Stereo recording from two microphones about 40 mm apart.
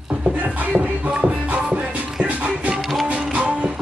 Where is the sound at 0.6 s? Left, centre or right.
Right.